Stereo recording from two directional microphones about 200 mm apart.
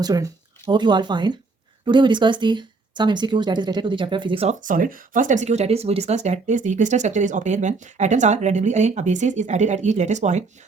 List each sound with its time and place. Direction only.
0.0 s speech: 20° right (ahead or behind)
4.6 s speech: 40° right (ahead or behind)